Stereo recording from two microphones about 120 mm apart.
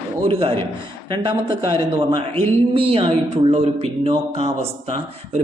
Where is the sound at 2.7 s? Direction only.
50° right (ahead or behind).